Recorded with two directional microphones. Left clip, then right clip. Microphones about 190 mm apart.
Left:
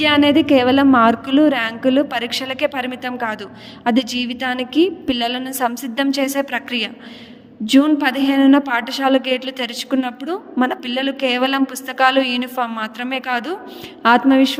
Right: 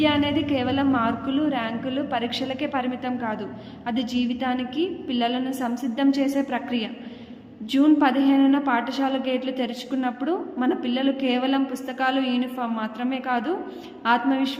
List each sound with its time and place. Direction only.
0.0 s a woman's voice: 45° left (ahead or behind)